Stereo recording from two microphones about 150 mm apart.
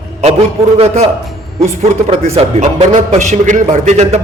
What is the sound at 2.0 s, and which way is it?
Speech, 45° right (ahead or behind).